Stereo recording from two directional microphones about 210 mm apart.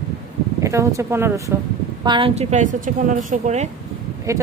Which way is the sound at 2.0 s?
25° right (ahead or behind).